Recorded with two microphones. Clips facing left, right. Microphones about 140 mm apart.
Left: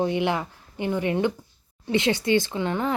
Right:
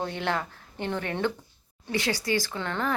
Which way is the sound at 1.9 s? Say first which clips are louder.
Left 6 dB; 25° left (ahead or behind).